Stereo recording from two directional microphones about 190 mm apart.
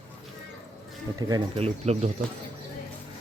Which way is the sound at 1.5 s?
35° right (ahead or behind).